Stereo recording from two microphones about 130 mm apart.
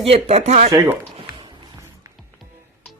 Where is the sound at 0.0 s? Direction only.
50° right (ahead or behind).